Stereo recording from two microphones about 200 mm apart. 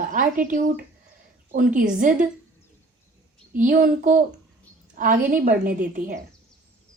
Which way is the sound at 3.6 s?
40° right (ahead or behind).